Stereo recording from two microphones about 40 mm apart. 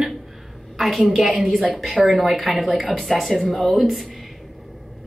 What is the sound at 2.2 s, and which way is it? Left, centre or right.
A woman's voice, centre.